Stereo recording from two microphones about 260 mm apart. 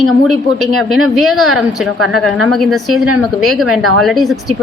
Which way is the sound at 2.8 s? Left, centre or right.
Right.